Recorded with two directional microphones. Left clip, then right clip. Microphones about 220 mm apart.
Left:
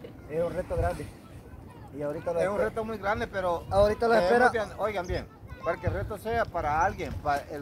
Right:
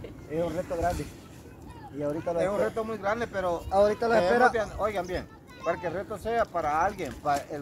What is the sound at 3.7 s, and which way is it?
Speech, 5° left (ahead or behind).